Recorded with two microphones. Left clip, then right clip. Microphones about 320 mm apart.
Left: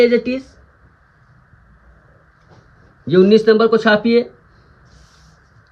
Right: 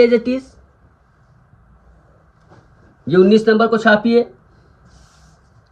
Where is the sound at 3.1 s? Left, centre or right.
Centre.